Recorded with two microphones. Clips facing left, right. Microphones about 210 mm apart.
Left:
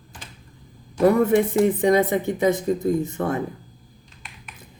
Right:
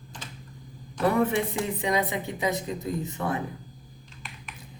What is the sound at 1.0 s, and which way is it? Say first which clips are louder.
Speech: left 7 dB; 40° left (ahead or behind).